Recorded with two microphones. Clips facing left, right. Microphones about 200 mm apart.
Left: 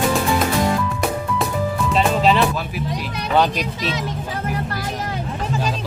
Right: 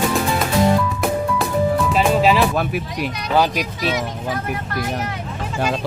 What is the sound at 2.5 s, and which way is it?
Speech, 60° right (ahead or behind).